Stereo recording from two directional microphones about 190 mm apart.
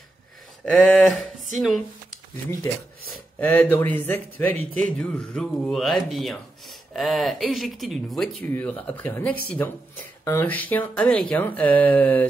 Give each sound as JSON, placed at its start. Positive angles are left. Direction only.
{"t": 0.7, "sound": "speech", "side_deg": 5}
{"t": 2.4, "sound": "speech", "side_deg": 15}